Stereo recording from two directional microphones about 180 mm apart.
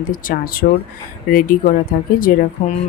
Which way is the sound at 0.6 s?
60° left (ahead or behind).